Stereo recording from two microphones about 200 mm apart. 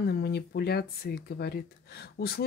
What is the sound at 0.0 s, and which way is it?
Speech, 55° left (ahead or behind).